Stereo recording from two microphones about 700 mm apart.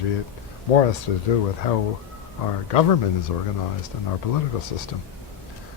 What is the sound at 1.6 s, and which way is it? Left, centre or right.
Speech, left.